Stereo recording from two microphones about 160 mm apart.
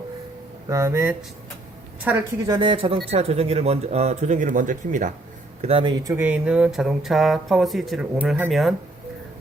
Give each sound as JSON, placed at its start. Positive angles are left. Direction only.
{"t": 0.7, "sound": "speech", "side_deg": -20}
{"t": 2.5, "sound": "speech", "side_deg": -30}
{"t": 5.6, "sound": "speech", "side_deg": -35}
{"t": 6.1, "sound": "speech", "side_deg": -10}